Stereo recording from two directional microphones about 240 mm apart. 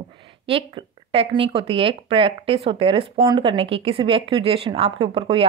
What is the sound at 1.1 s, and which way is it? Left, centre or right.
Speech, right.